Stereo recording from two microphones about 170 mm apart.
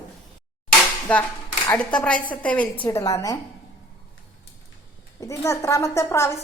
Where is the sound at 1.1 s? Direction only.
5° left (ahead or behind).